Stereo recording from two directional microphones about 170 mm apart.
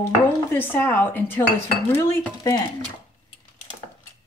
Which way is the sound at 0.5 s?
10° left (ahead or behind).